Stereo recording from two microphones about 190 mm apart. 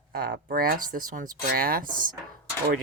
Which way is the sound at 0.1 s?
50° right (ahead or behind).